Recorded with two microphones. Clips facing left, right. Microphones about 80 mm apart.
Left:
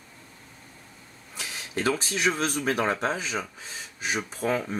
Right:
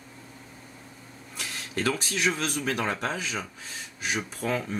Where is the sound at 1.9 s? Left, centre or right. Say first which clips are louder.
Left 2 dB; left.